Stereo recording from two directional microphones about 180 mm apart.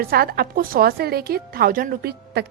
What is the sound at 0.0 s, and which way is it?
A woman's voice, 55° right (ahead or behind).